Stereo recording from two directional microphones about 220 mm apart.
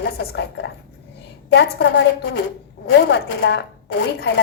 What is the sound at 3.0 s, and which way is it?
A woman's voice, 55° left (ahead or behind).